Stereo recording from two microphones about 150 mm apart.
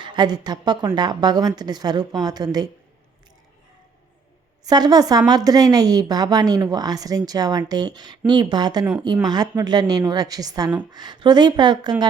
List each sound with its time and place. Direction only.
0.0 s speech: 30° right (ahead or behind)
4.6 s speech: 25° right (ahead or behind)